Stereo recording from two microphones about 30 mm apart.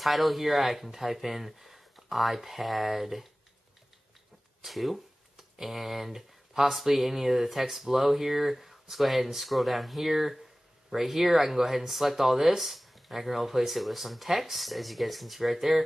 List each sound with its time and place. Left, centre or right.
0.0 s speech: centre
4.6 s speech: centre